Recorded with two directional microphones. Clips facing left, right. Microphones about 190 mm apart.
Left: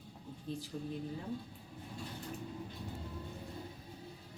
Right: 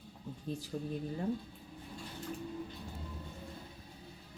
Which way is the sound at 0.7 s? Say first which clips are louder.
Right 4 dB; 45° right (ahead or behind).